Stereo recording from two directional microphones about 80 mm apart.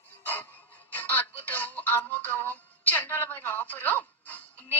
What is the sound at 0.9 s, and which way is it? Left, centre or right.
A woman's voice, left.